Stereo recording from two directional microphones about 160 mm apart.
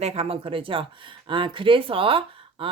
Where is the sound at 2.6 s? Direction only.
35° right (ahead or behind).